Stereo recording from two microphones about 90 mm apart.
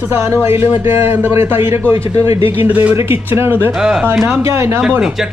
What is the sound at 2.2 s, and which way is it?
Speech, 90° left.